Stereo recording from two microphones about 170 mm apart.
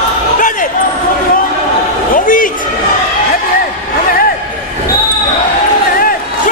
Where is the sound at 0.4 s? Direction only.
50° left (ahead or behind).